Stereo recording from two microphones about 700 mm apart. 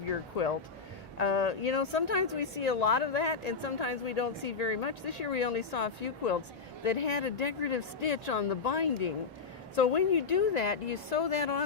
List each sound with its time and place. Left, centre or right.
0.1 s a woman's voice: left